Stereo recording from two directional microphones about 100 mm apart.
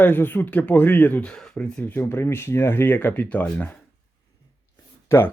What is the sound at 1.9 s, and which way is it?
Speech, 25° left (ahead or behind).